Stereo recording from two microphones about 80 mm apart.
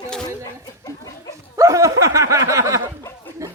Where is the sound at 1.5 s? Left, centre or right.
Right.